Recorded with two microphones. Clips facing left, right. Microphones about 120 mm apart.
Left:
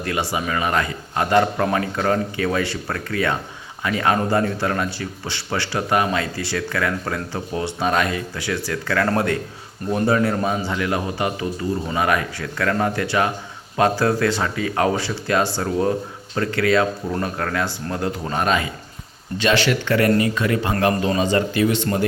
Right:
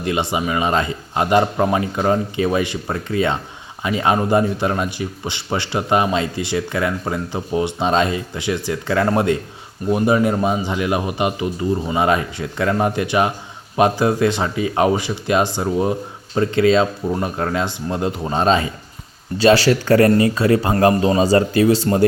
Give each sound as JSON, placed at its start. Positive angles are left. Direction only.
{"t": 0.0, "sound": "a man's voice", "side_deg": -20}